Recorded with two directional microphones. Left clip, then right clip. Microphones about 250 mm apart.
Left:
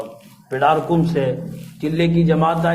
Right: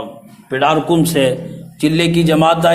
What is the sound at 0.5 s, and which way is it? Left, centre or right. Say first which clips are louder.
A man's voice: right 3 dB; right.